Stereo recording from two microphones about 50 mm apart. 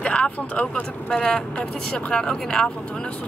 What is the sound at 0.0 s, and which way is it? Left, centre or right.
Vehicle, left.